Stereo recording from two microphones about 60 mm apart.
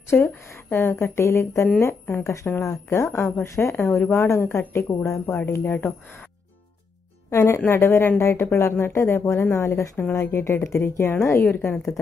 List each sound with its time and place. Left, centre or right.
0.1 s speech: left
0.7 s speech: left
3.7 s speech: left
7.2 s speech: left
11.4 s speech: left